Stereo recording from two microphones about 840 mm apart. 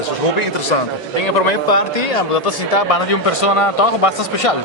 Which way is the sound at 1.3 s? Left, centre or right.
Left.